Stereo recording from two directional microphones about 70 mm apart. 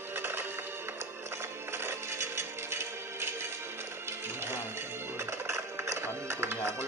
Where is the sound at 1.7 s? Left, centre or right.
Right.